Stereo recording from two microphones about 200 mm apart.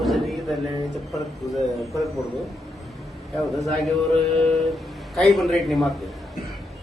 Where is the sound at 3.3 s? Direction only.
Centre (ahead or behind).